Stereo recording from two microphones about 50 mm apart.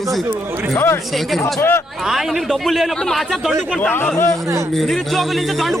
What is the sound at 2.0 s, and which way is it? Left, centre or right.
A man's voice, centre.